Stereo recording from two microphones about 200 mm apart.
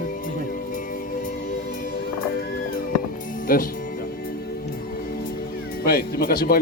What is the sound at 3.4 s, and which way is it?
Speech, 45° left (ahead or behind).